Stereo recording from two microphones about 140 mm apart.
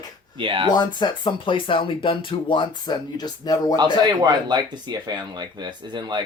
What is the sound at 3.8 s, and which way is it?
Speech, 30° right (ahead or behind).